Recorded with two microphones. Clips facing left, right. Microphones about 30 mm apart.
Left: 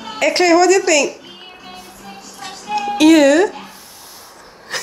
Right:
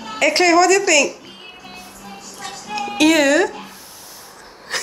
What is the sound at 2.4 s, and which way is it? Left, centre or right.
Music, centre.